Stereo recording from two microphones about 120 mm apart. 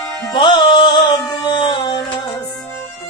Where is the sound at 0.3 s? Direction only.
35° left (ahead or behind).